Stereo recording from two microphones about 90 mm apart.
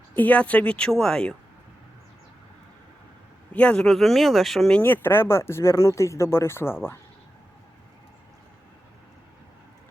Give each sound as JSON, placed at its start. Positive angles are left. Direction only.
{"t": 0.2, "sound": "a woman's voice", "side_deg": 15}
{"t": 3.5, "sound": "speech", "side_deg": 15}
{"t": 4.8, "sound": "speech", "side_deg": 25}